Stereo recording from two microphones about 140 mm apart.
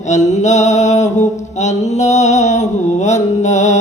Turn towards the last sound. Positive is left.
turn(degrees=55)  # may be behind; listen again after turning